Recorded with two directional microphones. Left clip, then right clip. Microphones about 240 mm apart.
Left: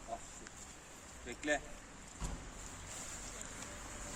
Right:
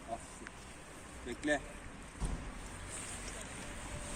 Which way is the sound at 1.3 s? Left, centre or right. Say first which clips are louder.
Right 2 dB; centre.